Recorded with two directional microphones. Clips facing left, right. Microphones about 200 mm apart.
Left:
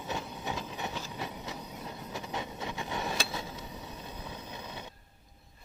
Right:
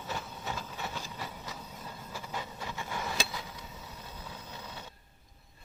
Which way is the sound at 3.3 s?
25° left (ahead or behind).